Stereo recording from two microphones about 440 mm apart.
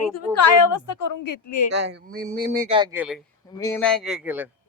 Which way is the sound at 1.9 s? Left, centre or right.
Right.